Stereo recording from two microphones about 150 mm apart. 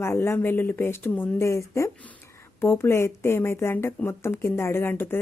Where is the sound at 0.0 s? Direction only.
15° left (ahead or behind).